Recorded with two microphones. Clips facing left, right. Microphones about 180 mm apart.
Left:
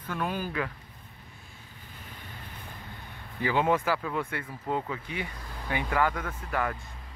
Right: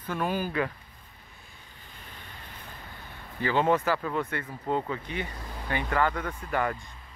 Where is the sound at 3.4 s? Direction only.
10° left (ahead or behind).